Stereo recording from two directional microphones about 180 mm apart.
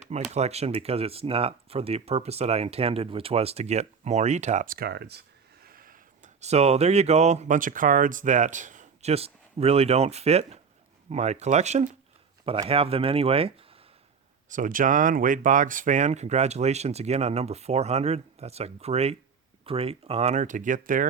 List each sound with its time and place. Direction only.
0.1 s speech: 35° right (ahead or behind); by 5.2 s 65° right (ahead or behind)
5.6 s speech: 50° right (ahead or behind); by 13.7 s 30° right (ahead or behind)
14.5 s speech: 50° right (ahead or behind)